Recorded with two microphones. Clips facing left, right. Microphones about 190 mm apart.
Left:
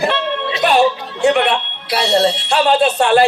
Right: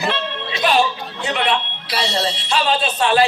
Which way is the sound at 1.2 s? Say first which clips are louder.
Left 9 dB; 50° left (ahead or behind).